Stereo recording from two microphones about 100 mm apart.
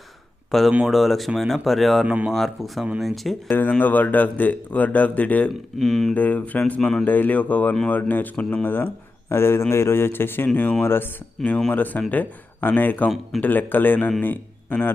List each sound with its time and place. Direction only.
0.5 s speech: centre (ahead or behind)
2.0 s speech: 15° right (ahead or behind)
2.3 s speech: centre (ahead or behind)
3.5 s speech: 20° left (ahead or behind)
5.8 s speech: centre (ahead or behind)
6.1 s a man's voice: 15° left (ahead or behind)
11.4 s speech: centre (ahead or behind)
11.7 s a man's voice: 15° left (ahead or behind)